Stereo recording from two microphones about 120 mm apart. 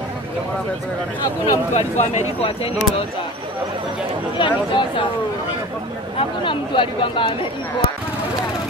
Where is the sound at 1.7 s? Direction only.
70° left (ahead or behind).